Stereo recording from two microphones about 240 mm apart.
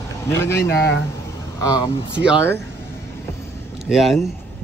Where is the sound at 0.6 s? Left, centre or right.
Left.